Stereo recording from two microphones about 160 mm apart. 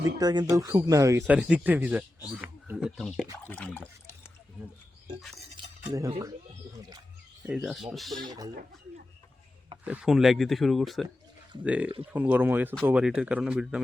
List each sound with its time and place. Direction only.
0.0 s speech: 25° right (ahead or behind)
1.4 s speech: 10° right (ahead or behind); by 4.3 s 15° left (ahead or behind)
5.9 s speech: 20° right (ahead or behind)
7.4 s speech: 5° right (ahead or behind)
9.8 s speech: 5° right (ahead or behind)